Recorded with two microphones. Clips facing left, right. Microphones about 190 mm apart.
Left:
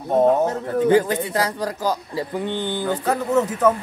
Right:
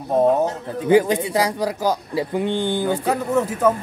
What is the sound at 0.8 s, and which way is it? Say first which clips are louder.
Speech: right 2 dB; 10° right (ahead or behind).